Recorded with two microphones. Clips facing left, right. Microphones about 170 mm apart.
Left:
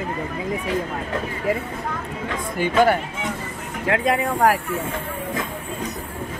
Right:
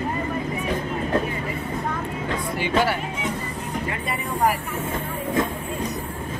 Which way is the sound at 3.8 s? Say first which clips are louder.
Left 8 dB; 90° left.